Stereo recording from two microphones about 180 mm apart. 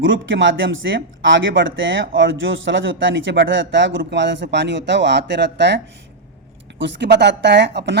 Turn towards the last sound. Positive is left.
turn(degrees=-70)  # may be behind; listen again after turning